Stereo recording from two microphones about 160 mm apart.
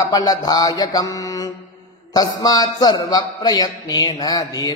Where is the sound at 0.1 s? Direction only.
25° left (ahead or behind).